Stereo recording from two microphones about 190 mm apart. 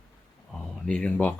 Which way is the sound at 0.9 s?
5° left (ahead or behind).